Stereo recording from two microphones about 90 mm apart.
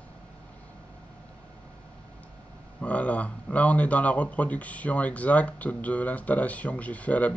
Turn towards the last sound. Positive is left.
turn(degrees=15)  # may be behind; listen again after turning